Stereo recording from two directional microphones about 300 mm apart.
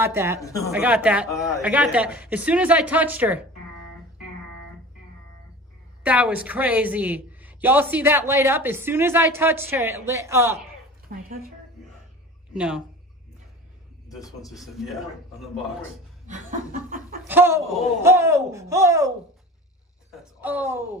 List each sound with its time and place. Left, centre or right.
0.0 s a woman's voice: centre
6.0 s a woman's voice: centre
11.1 s chuckle: right
12.5 s a man's voice: centre
14.5 s a man's voice: centre
16.3 s chuckle: right
17.2 s a woman's voice: centre